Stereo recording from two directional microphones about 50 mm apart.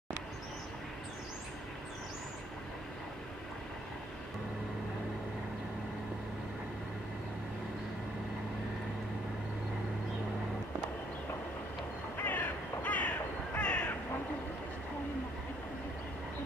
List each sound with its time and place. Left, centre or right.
12.2 s crow: left